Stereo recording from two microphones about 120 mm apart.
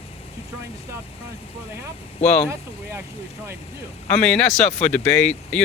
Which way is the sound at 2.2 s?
65° left (ahead or behind).